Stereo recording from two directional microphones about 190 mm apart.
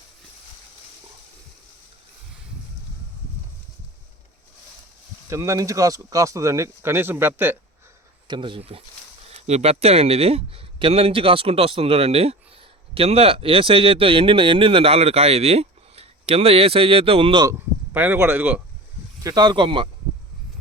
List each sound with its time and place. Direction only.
5.3 s speech: 15° right (ahead or behind)
8.3 s speech: 25° right (ahead or behind)
17.5 s speech: 10° right (ahead or behind)
19.2 s speech: 20° right (ahead or behind)